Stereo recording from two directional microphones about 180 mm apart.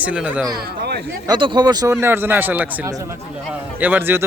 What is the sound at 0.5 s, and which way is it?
Speech, 60° right (ahead or behind).